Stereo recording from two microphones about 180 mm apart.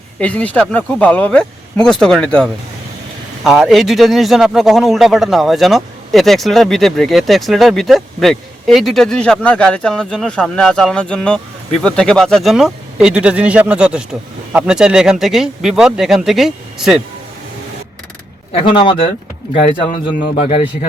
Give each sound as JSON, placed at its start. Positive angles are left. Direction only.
{"t": 0.2, "sound": "speech", "side_deg": 5}
{"t": 18.5, "sound": "a man's voice", "side_deg": 30}
{"t": 20.3, "sound": "speech", "side_deg": 35}